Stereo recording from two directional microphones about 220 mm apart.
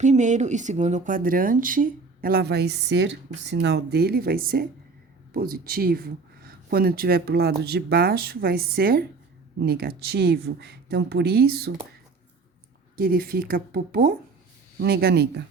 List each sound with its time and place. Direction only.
0.0 s speech: 35° right (ahead or behind)
13.0 s speech: 45° right (ahead or behind)